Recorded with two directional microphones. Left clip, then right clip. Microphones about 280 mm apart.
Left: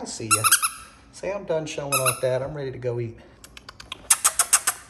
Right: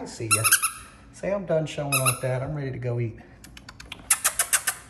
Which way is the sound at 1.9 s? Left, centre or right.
Left.